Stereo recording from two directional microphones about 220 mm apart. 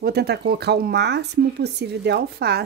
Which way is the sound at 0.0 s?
45° right (ahead or behind).